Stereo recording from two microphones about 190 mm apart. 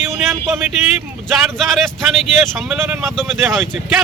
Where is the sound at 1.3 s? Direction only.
Centre (ahead or behind).